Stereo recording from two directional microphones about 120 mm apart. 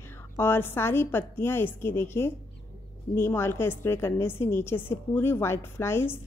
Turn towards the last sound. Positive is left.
turn(degrees=20)  # may be behind; listen again after turning